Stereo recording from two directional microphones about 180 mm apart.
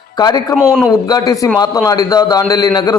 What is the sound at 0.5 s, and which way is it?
Speech, centre (ahead or behind).